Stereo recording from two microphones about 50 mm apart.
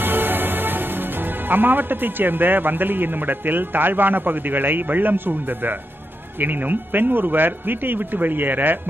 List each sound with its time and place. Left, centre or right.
0.0 s a man's voice: right